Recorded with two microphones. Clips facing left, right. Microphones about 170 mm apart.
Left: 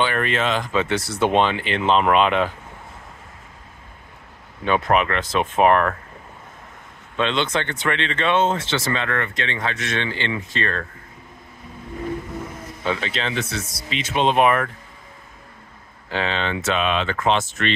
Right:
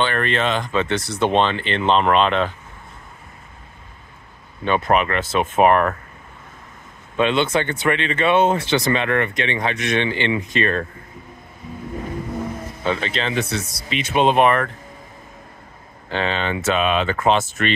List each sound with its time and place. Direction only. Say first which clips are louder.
0.0 s speech: right 1 dB; 5° left (ahead or behind)
4.6 s speech: right 1 dB; centre (ahead or behind)
7.2 s speech: right 4 dB; 10° right (ahead or behind)
12.8 s speech: right 2 dB; centre (ahead or behind)
13.3 s speech: right 3 dB; 15° right (ahead or behind)
13.7 s speech: right 3 dB; 60° right (ahead or behind)
14.1 s speech: right 3 dB; 5° right (ahead or behind)
14.4 s speech: right 1 dB; 5° left (ahead or behind)
16.1 s speech: right 1 dB; centre (ahead or behind)